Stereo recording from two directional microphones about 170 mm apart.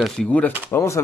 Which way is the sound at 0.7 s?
15° left (ahead or behind).